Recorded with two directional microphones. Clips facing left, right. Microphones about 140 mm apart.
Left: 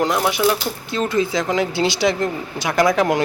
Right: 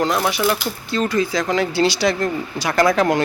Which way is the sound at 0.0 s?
15° left (ahead or behind).